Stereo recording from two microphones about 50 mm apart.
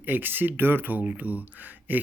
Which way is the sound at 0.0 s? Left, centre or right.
Right.